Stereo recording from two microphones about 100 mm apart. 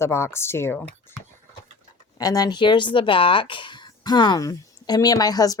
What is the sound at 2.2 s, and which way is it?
Speech, 40° left (ahead or behind).